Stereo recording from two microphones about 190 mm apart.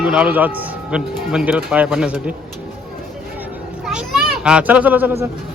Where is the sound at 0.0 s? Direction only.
5° right (ahead or behind).